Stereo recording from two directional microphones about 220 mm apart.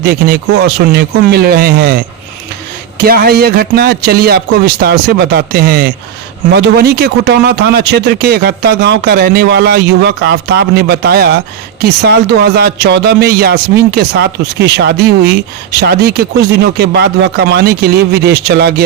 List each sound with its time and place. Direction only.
0.0 s speech: 45° right (ahead or behind)
3.0 s speech: 45° right (ahead or behind)